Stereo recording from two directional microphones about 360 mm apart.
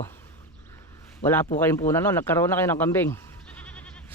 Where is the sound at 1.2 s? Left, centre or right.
Centre.